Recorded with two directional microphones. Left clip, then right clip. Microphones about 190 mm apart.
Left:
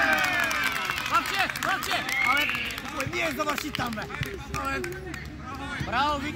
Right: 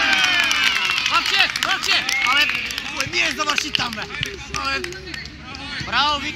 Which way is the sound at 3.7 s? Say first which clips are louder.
Right 9 dB; 40° left (ahead or behind).